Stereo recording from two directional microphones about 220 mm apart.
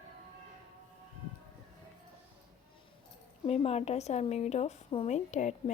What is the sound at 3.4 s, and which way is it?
A woman's voice, 25° left (ahead or behind).